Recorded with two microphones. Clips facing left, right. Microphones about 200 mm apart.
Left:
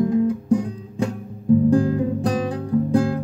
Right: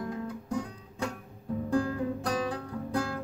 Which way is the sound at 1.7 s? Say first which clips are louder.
Left 10 dB; 20° left (ahead or behind).